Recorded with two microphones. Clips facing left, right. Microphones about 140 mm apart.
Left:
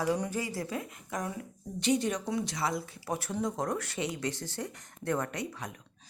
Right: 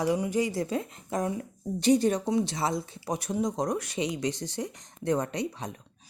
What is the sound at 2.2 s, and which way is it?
Speech, 25° right (ahead or behind).